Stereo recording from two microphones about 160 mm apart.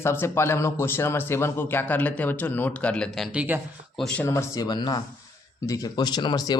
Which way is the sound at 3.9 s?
5° left (ahead or behind).